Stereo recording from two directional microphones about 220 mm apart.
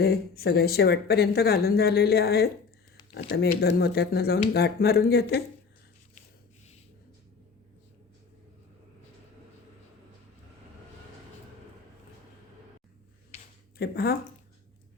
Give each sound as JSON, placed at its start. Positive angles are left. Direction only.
{"t": 0.0, "sound": "speech", "side_deg": 45}
{"t": 13.7, "sound": "speech", "side_deg": 45}